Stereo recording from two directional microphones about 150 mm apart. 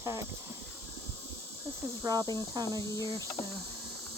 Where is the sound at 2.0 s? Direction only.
25° right (ahead or behind).